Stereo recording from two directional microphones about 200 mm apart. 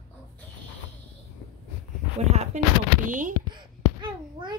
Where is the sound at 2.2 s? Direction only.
35° right (ahead or behind).